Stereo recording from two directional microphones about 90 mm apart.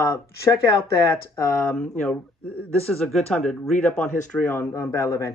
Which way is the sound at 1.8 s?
15° left (ahead or behind).